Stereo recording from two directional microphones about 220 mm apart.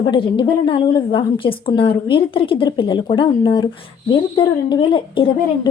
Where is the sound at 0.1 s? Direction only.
20° left (ahead or behind).